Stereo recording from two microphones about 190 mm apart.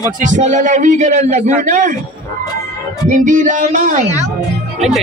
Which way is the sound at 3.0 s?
45° right (ahead or behind).